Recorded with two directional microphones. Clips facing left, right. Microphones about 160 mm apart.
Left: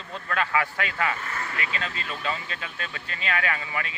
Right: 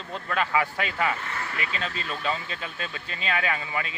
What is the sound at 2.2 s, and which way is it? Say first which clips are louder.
Speech: right 1 dB; 25° right (ahead or behind).